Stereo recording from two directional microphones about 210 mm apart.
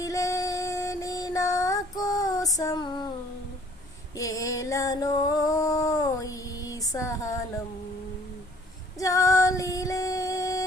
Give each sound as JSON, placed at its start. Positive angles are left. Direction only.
{"t": 0.0, "sound": "female singing", "side_deg": 15}
{"t": 4.2, "sound": "a sound", "side_deg": 15}
{"t": 9.0, "sound": "female singing", "side_deg": 15}